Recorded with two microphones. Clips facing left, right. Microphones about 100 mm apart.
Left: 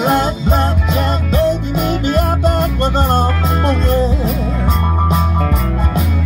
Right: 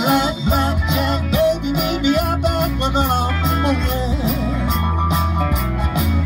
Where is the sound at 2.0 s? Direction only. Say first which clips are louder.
Even; 40° left (ahead or behind).